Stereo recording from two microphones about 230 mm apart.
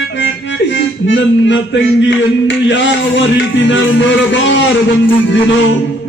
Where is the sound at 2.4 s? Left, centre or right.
Left.